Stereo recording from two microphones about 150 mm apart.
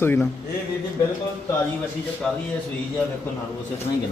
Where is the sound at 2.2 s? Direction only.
5° left (ahead or behind).